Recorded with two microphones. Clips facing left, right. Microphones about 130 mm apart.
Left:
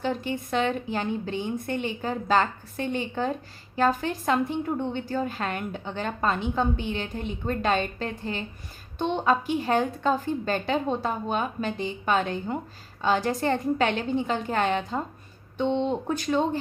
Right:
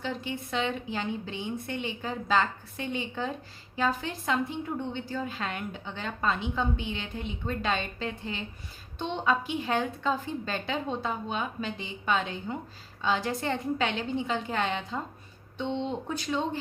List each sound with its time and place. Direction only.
0.0 s a woman's voice: 50° left (ahead or behind)